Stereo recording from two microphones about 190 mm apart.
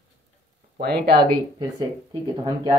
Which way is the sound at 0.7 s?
55° right (ahead or behind).